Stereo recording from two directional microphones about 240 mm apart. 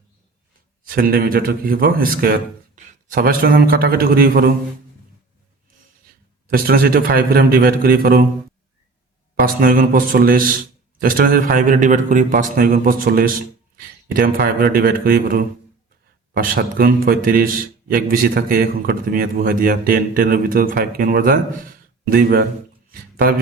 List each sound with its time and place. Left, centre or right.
0.9 s a man's voice: right
6.5 s a man's voice: right
9.3 s a man's voice: right